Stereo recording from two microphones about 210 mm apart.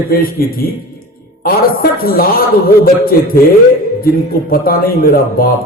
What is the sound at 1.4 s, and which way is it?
Speech, 45° left (ahead or behind).